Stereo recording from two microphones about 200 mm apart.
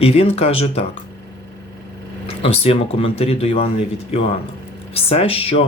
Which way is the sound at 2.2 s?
30° left (ahead or behind).